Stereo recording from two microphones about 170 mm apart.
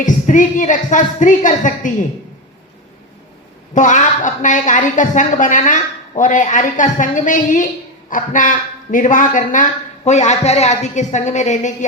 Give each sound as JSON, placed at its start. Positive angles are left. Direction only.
{"t": 0.0, "sound": "a woman's voice", "side_deg": 50}
{"t": 3.8, "sound": "a woman's voice", "side_deg": 50}